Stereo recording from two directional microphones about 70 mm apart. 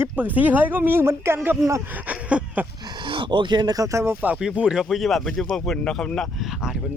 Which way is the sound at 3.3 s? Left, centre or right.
Right.